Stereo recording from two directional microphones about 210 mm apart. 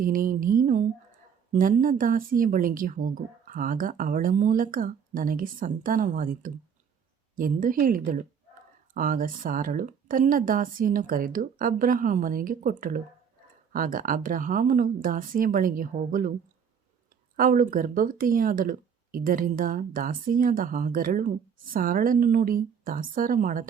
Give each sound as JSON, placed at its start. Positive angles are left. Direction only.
{"t": 0.0, "sound": "speech", "side_deg": -40}
{"t": 17.3, "sound": "speech", "side_deg": -40}